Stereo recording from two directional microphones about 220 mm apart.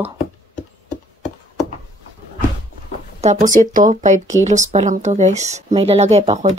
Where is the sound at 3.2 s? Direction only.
30° right (ahead or behind).